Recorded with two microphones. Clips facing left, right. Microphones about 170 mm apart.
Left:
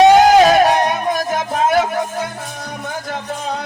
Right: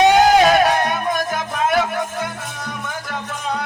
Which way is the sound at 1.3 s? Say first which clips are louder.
Left 4 dB; 45° left (ahead or behind).